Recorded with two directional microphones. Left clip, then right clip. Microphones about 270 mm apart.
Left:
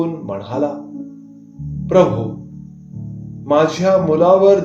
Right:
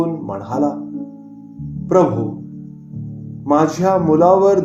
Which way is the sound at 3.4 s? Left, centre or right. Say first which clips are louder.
Left 1 dB; right.